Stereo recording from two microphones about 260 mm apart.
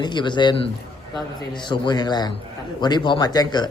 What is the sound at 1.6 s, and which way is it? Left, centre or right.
A man's voice, centre.